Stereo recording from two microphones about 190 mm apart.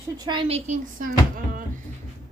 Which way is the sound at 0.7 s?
45° right (ahead or behind).